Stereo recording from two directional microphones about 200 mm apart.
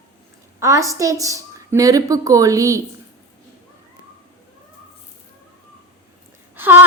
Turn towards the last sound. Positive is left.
turn(degrees=-10)  # may be behind; listen again after turning